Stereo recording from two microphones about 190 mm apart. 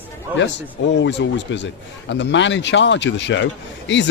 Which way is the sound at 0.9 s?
70° left (ahead or behind).